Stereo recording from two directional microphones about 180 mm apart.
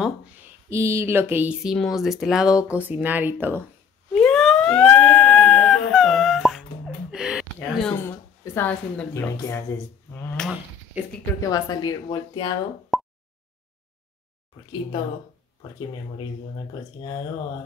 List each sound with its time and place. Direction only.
0.7 s speech: 15° right (ahead or behind)
4.1 s a sound: 5° left (ahead or behind)
7.1 s gasp: 5° right (ahead or behind)
7.9 s speech: 15° left (ahead or behind)
10.9 s speech: 10° right (ahead or behind)
11.5 s speech: 20° left (ahead or behind)
12.9 s a sound: centre (ahead or behind)